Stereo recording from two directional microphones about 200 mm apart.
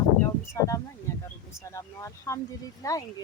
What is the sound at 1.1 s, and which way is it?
Speech, 15° left (ahead or behind).